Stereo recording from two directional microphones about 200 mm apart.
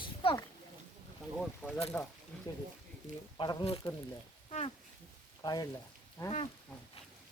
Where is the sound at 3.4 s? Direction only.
20° left (ahead or behind).